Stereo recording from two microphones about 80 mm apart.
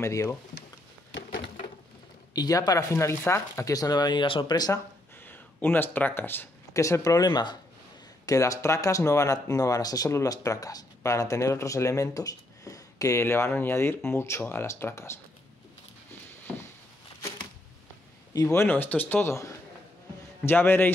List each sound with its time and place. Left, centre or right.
0.0 s speech: left
2.3 s speech: left
3.0 s speech: left
5.2 s speech: left
6.7 s speech: left
8.3 s speech: left
13.2 s speech: left
18.5 s speech: left
19.2 s speech: left
20.4 s speech: left